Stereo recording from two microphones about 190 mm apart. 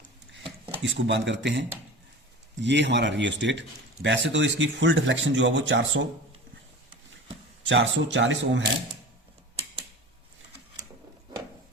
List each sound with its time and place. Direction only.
0.8 s speech: 70° right (ahead or behind)
7.6 s speech: 75° right (ahead or behind)